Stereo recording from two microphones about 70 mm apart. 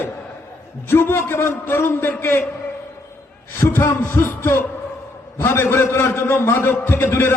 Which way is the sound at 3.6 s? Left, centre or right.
Left.